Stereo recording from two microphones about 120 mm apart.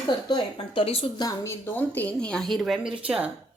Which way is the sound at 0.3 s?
40° left (ahead or behind).